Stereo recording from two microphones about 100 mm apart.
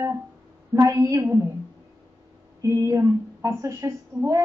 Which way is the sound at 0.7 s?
30° right (ahead or behind).